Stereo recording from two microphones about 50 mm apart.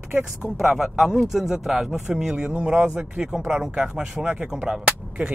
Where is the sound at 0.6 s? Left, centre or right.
Centre.